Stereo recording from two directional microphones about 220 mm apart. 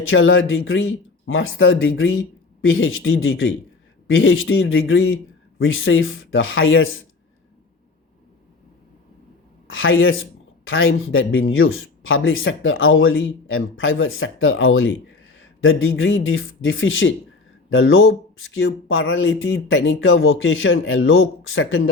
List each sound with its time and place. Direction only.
0.1 s speech: 65° left (ahead or behind)
9.6 s speech: 60° left (ahead or behind)